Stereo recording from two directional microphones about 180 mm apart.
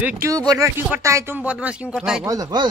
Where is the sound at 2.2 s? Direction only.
20° right (ahead or behind).